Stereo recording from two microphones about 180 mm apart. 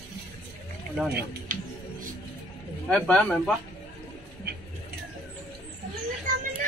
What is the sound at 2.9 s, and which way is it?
Speech, 5° left (ahead or behind).